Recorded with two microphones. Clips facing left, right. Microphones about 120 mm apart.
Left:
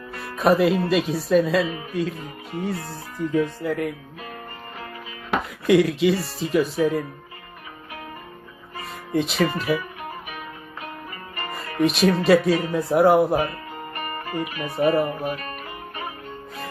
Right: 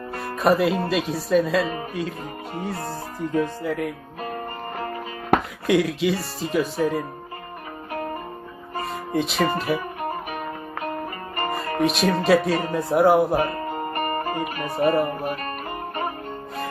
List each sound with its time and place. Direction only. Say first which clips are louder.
0.3 s speech: left 1 dB; centre (ahead or behind)
1.6 s a man's voice: right 2 dB; 40° right (ahead or behind)
1.9 s speech: left 2 dB; centre (ahead or behind)
4.2 s music: right 7 dB; 40° right (ahead or behind)
5.4 s speech: left 3 dB; centre (ahead or behind)
7.9 s music: right 9 dB; 45° right (ahead or behind)
8.9 s music: left 2 dB; centre (ahead or behind)
9.6 s speech: left 1 dB; centre (ahead or behind)
10.0 s music: right 6 dB; 45° right (ahead or behind)
11.8 s speech: left 3 dB; centre (ahead or behind)
13.5 s music: right 7 dB; 40° right (ahead or behind)
14.8 s speech: even; centre (ahead or behind)
15.4 s music: right 4 dB; 45° right (ahead or behind)